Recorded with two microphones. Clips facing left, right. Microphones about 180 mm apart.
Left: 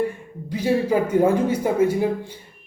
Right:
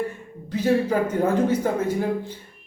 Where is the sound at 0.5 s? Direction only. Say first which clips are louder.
Left 1 dB; 10° left (ahead or behind).